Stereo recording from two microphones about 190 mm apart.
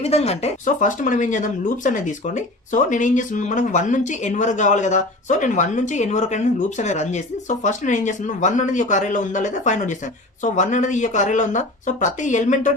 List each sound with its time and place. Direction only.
0.0 s speech: 35° left (ahead or behind)